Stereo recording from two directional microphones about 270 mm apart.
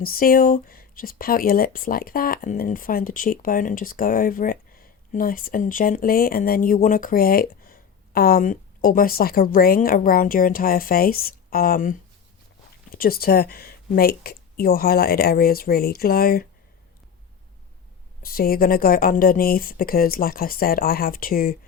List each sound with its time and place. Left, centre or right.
0.0 s speech: left
18.2 s speech: left